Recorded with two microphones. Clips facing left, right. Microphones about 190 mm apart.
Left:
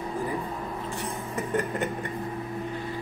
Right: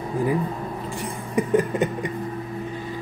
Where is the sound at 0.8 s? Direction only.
15° right (ahead or behind).